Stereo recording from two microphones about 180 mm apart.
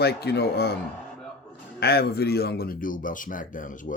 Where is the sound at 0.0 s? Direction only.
65° left (ahead or behind).